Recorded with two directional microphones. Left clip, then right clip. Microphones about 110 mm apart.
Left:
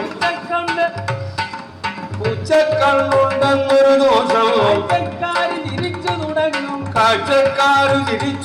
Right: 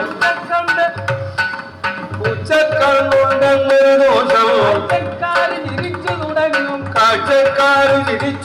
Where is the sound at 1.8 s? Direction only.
10° left (ahead or behind).